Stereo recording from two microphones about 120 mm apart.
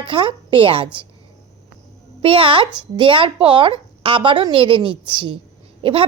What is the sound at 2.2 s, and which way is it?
A woman's voice, 45° right (ahead or behind).